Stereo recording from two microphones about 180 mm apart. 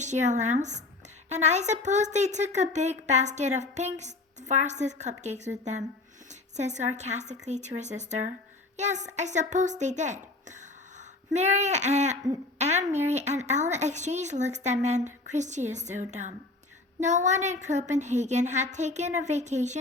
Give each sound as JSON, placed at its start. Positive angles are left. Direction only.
{"t": 0.0, "sound": "speech", "side_deg": -40}